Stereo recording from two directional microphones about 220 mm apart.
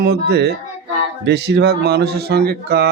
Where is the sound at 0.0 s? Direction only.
50° right (ahead or behind).